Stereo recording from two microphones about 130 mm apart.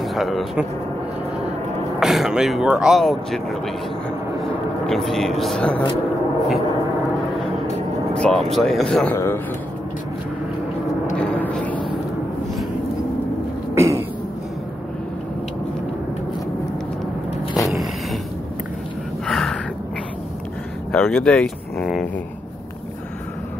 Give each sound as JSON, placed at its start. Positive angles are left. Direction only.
{"t": 0.0, "sound": "speech", "side_deg": 0}
{"t": 2.0, "sound": "speech", "side_deg": -5}
{"t": 8.1, "sound": "speech", "side_deg": 5}
{"t": 9.1, "sound": "speech", "side_deg": 20}
{"t": 11.1, "sound": "vehicle", "side_deg": 10}
{"t": 13.7, "sound": "cough", "side_deg": -20}
{"t": 17.6, "sound": "a sound", "side_deg": 0}
{"t": 19.2, "sound": "gasp", "side_deg": 5}
{"t": 20.9, "sound": "a sound", "side_deg": 5}